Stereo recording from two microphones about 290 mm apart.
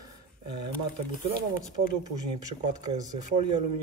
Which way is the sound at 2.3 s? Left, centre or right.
Right.